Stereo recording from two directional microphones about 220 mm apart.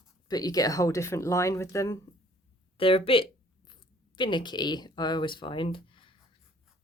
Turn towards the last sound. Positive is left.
turn(degrees=25)  # may be behind; listen again after turning